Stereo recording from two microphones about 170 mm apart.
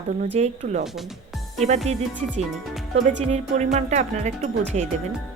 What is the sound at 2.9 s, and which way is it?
Speech, 40° right (ahead or behind).